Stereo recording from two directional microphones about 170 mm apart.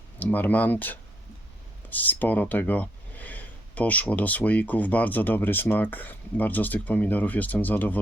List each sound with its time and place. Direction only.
0.2 s speech: 10° left (ahead or behind)